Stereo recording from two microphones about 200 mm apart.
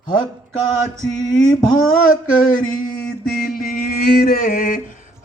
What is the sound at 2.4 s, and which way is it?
Male singing, 45° left (ahead or behind).